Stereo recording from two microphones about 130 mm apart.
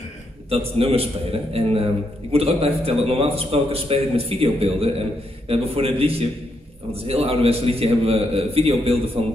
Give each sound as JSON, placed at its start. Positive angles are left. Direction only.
{"t": 0.5, "sound": "a man's voice", "side_deg": -50}